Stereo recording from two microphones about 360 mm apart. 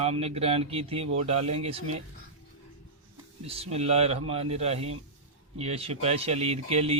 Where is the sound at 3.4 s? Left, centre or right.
Centre.